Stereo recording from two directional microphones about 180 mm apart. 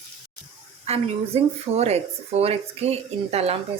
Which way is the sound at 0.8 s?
35° right (ahead or behind).